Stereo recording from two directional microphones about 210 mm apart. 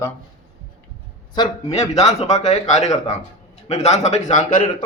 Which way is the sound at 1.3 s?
20° left (ahead or behind).